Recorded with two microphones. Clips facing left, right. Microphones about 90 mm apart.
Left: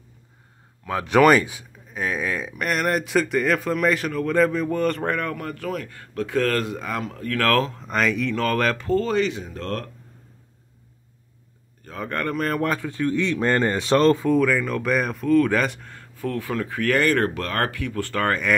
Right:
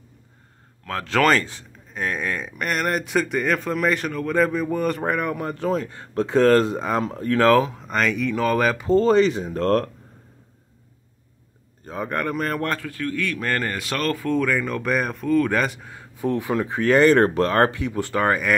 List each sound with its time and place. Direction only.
0.8 s speech: 15° left (ahead or behind); by 7.7 s 15° right (ahead or behind)
7.7 s speech: centre (ahead or behind)
9.0 s speech: 35° right (ahead or behind)
11.8 s a sound: 20° right (ahead or behind)
12.1 s speech: 5° right (ahead or behind)
12.8 s speech: 20° left (ahead or behind)
14.3 s speech: centre (ahead or behind); by 18.4 s 15° right (ahead or behind)